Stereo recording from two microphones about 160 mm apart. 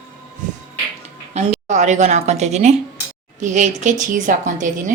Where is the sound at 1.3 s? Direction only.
45° right (ahead or behind).